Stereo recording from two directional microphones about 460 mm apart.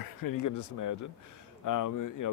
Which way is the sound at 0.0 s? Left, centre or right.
Left.